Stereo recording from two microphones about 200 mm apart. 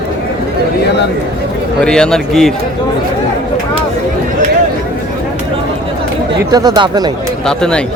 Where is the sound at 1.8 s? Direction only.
5° left (ahead or behind).